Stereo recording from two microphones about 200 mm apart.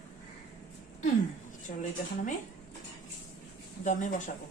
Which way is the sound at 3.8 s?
40° left (ahead or behind).